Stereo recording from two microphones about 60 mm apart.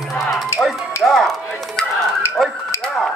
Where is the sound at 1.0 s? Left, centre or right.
Centre.